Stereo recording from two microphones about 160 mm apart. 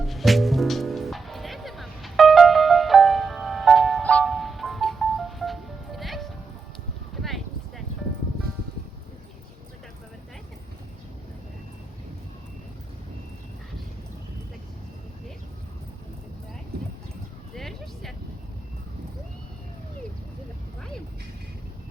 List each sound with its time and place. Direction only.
0.0 s music: centre (ahead or behind)
7.2 s a sound: centre (ahead or behind)
16.7 s clip-clop: 80° right
17.5 s vehicle: centre (ahead or behind)